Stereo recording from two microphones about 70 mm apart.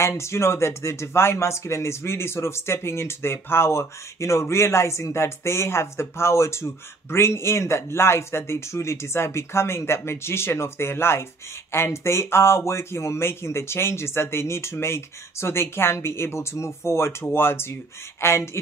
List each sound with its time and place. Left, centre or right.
0.2 s speech: left